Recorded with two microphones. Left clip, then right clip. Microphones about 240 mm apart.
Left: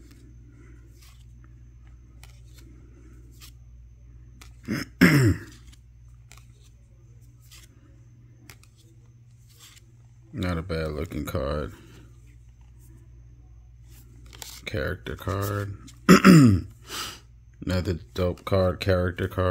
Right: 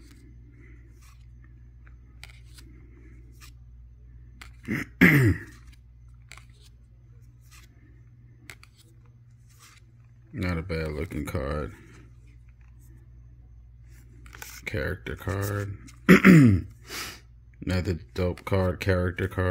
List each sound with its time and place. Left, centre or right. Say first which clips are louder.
4.4 s throat clearing: even; centre
10.3 s speech: left 1 dB; centre
14.3 s biting: left 1 dB; centre
14.6 s speech: left 1 dB; centre